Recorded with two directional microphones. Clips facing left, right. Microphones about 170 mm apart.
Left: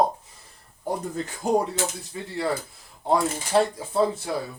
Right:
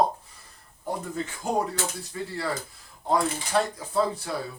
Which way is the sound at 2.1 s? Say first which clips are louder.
Right 2 dB; 20° left (ahead or behind).